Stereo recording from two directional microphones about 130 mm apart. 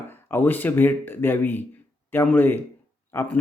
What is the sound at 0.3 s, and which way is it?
Speech, 15° left (ahead or behind).